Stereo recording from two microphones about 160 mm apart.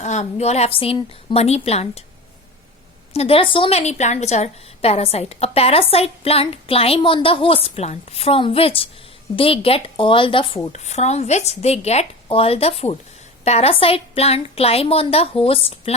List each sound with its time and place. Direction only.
0.0 s a woman's voice: 45° left (ahead or behind)
3.1 s a woman's voice: 40° left (ahead or behind)
10.7 s a woman's voice: 45° left (ahead or behind)